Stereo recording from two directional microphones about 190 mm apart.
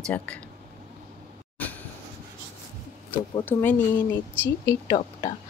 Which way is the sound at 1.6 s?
10° left (ahead or behind).